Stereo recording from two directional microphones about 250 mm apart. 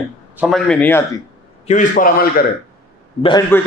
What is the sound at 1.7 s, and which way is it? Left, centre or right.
Speech, left.